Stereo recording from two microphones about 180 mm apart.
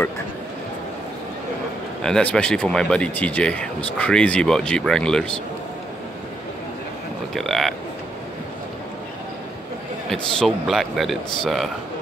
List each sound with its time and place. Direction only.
2.0 s speech: 5° left (ahead or behind)
7.3 s speech: centre (ahead or behind)
10.1 s speech: centre (ahead or behind)